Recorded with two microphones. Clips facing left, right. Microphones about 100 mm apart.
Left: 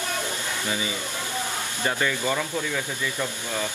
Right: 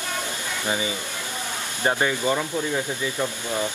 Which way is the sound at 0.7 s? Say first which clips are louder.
Right 5 dB; 30° right (ahead or behind).